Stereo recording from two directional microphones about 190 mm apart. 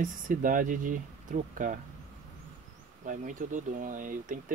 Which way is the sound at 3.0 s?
40° right (ahead or behind).